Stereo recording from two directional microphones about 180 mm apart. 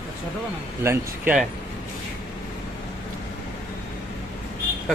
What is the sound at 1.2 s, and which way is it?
Speech, 5° right (ahead or behind).